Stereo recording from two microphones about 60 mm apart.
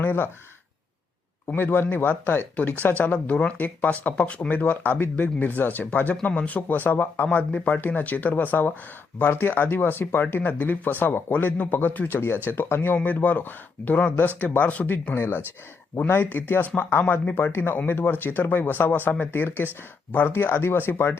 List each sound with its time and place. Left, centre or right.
0.0 s speech: left
1.5 s speech: left
7.3 s speech: left
15.1 s speech: left